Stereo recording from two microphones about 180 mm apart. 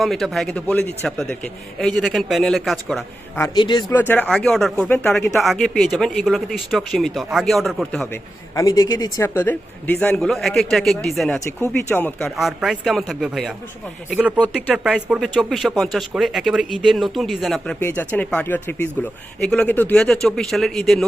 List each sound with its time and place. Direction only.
0.0 s speech: centre (ahead or behind)
3.3 s a man's voice: 20° left (ahead or behind)
3.9 s speech: 10° left (ahead or behind)
8.1 s a man's voice: 20° left (ahead or behind); by 11.3 s centre (ahead or behind)
11.4 s speech: 10° left (ahead or behind)
12.4 s speech: centre (ahead or behind)
14.3 s speech: 5° left (ahead or behind)